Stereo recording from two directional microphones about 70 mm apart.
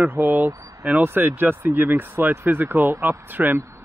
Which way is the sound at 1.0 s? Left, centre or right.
Right.